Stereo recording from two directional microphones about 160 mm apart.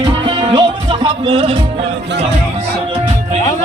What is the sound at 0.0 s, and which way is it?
Music, 30° right (ahead or behind).